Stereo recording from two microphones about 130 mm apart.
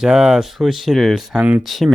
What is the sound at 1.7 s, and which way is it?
Speech, centre (ahead or behind).